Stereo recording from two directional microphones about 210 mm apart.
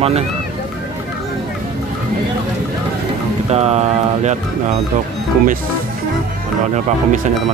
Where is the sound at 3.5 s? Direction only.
30° right (ahead or behind).